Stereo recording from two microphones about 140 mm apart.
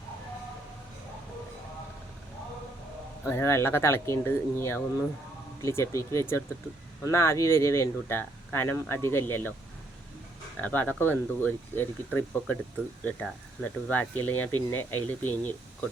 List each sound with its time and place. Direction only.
3.2 s speech: 20° left (ahead or behind)
10.6 s speech: 10° left (ahead or behind)